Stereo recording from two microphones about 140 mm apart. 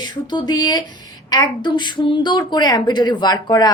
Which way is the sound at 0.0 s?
30° left (ahead or behind).